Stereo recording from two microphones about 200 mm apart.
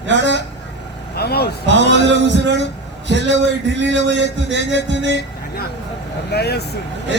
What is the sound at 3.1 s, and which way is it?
A man's voice, 60° right (ahead or behind).